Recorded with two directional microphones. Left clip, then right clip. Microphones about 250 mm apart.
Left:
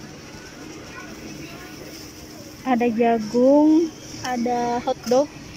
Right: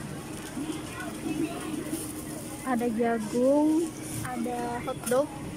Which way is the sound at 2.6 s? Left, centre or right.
Centre.